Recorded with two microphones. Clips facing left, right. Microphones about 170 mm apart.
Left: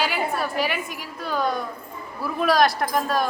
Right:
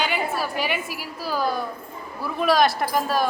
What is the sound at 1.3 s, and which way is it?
Speech, 5° right (ahead or behind).